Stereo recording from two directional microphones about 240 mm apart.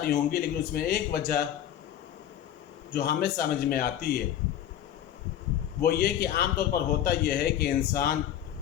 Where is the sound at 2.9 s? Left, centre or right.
Left.